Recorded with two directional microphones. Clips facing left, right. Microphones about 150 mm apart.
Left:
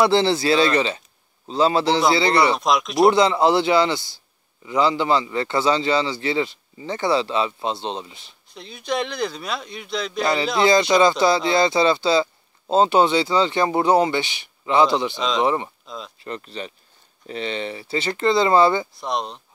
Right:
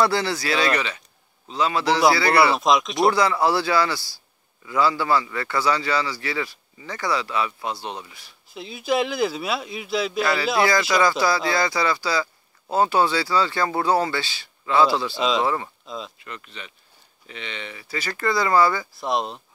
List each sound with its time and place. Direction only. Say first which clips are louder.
0.0 s speech: left 4 dB; 25° left (ahead or behind)
2.5 s speech: even; centre (ahead or behind)
3.1 s speech: left 3 dB; 20° left (ahead or behind)
8.5 s speech: right 3 dB; 5° right (ahead or behind)
10.2 s speech: left 4 dB; 20° left (ahead or behind)
15.1 s speech: right 1 dB; 5° right (ahead or behind)
15.4 s speech: left 3 dB; 20° left (ahead or behind)
16.2 s speech: left 8 dB; 35° left (ahead or behind)
18.9 s speech: right 1 dB; centre (ahead or behind)